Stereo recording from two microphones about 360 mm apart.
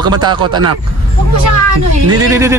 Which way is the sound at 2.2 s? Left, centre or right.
Centre.